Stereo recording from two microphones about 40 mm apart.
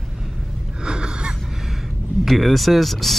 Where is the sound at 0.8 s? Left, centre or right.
Right.